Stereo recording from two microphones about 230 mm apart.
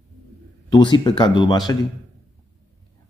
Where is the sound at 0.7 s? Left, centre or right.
Centre.